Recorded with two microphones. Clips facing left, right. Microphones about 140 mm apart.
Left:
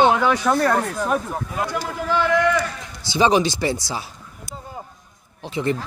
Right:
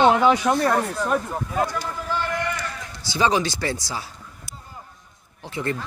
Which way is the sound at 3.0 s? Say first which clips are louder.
Left 4 dB; 20° left (ahead or behind).